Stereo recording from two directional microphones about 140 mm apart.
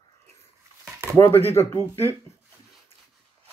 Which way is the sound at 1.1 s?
15° left (ahead or behind).